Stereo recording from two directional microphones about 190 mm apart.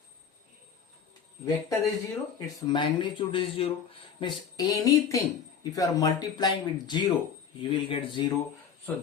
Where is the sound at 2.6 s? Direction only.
25° left (ahead or behind).